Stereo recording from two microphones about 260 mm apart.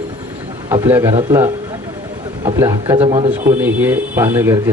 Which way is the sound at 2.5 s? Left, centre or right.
Centre.